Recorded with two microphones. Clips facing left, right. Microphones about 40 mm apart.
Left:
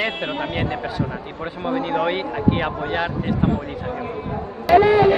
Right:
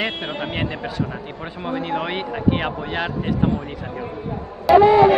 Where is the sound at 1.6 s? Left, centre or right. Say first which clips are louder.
Left 3 dB; centre.